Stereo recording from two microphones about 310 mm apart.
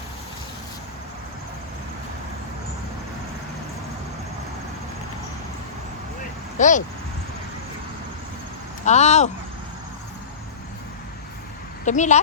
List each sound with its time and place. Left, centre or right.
6.6 s speech: left
8.8 s speech: left
11.9 s speech: left